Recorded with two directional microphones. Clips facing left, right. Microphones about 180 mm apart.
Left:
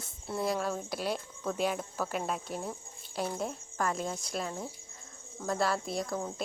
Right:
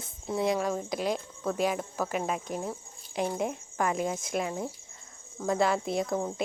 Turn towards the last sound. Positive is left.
turn(degrees=-20)  # may be behind; listen again after turning